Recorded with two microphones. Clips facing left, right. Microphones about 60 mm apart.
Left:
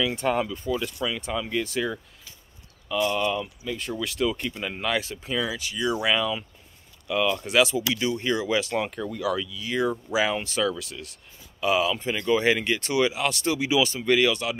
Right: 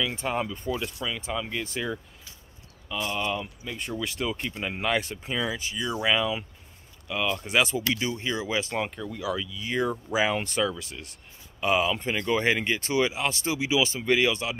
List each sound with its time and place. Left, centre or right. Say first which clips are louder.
0.2 s speech: left 4 dB; centre
0.5 s speech: left 3 dB; right
0.9 s speech: left 3 dB; centre
3.3 s speech: left 3 dB; right
5.2 s speech: left 1 dB; centre
7.4 s speech: left 3 dB; right
8.2 s speech: left 4 dB; centre
9.5 s speech: left 1 dB; right
9.8 s speech: left 2 dB; centre
10.1 s speech: right 1 dB; right
12.5 s speech: left 1 dB; centre